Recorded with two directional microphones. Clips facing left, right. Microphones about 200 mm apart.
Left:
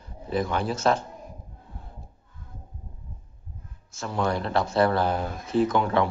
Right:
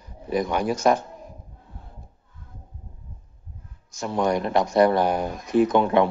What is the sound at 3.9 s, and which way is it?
Speech, 15° right (ahead or behind).